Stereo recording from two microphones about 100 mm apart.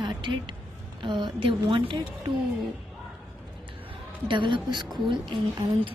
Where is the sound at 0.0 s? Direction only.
55° right (ahead or behind).